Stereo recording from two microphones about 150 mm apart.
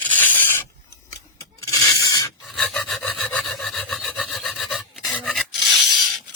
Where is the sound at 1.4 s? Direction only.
25° left (ahead or behind).